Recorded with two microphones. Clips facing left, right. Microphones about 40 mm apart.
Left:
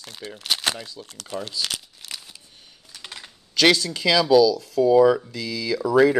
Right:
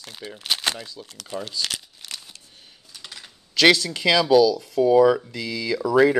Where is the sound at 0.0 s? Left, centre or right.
Centre.